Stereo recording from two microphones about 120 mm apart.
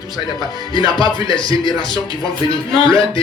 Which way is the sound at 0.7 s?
40° left (ahead or behind).